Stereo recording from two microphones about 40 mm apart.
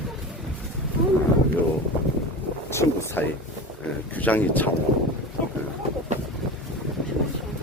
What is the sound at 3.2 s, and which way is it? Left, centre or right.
Speech, left.